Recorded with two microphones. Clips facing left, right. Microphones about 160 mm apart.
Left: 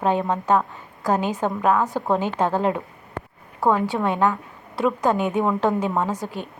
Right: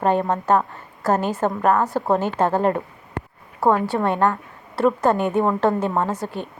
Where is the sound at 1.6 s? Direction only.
Centre (ahead or behind).